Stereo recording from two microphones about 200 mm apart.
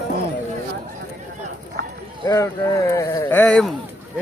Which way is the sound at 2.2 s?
15° left (ahead or behind).